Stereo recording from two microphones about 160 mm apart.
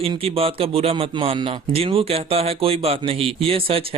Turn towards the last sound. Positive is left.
turn(degrees=-35)  # may be behind; listen again after turning